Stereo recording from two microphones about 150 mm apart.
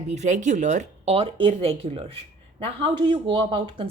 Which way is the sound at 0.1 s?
50° right (ahead or behind).